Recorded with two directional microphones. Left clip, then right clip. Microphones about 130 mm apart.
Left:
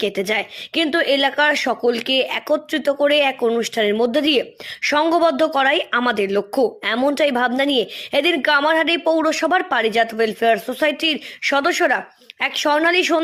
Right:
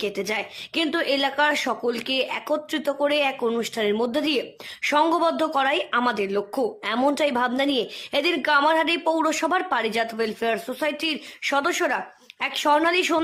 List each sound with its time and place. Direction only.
0.0 s a woman's voice: 30° left (ahead or behind)